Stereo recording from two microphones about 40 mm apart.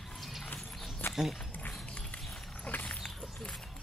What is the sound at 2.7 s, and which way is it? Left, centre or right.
Dog, left.